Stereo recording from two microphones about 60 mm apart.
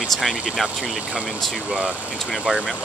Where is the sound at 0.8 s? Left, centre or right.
Centre.